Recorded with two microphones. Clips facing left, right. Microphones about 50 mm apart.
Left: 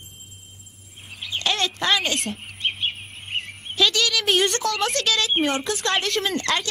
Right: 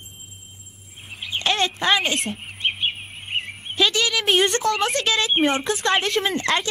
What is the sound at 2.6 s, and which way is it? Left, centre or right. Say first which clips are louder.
Bird: right 2 dB; centre.